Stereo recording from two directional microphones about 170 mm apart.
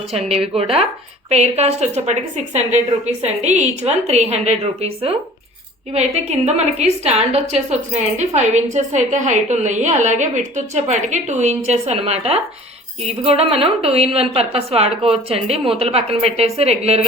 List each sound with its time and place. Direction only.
0.1 s a woman's voice: 35° right (ahead or behind)